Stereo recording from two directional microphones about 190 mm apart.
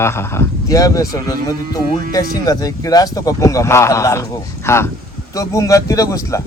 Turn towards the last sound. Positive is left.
turn(degrees=15)  # may be behind; listen again after turning